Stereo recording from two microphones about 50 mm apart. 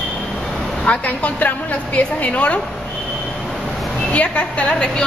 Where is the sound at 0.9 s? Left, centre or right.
Left.